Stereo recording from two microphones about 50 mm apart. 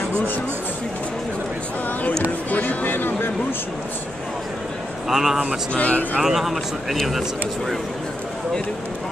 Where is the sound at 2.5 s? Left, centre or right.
Left.